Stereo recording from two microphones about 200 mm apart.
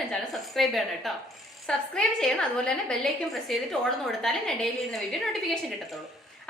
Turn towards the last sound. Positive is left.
turn(degrees=0)  # may be behind; listen again after turning